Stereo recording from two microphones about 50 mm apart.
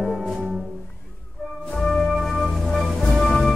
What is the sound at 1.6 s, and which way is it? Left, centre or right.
Music, centre.